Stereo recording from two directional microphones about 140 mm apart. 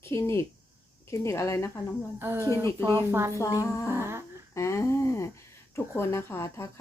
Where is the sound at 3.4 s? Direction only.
20° left (ahead or behind).